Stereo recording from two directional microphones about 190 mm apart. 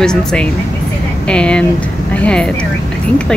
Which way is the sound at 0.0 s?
5° left (ahead or behind).